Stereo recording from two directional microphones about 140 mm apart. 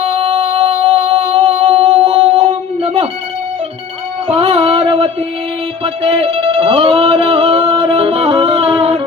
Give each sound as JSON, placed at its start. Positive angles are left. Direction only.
{"t": 0.0, "sound": "music", "side_deg": -45}
{"t": 4.3, "sound": "a sound", "side_deg": -45}
{"t": 5.8, "sound": "music", "side_deg": -45}